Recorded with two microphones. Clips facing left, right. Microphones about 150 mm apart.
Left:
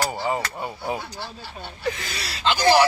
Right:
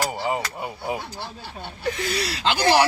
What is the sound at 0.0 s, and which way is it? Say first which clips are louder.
Speech: even; 15° right (ahead or behind).